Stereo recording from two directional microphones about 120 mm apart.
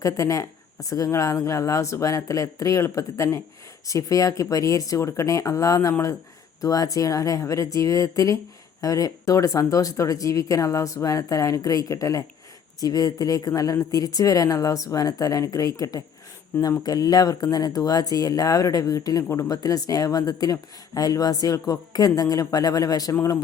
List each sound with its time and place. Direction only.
0.0 s speech: 25° left (ahead or behind)